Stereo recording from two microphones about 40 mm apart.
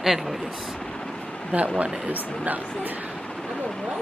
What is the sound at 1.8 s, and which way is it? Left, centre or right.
Speech, right.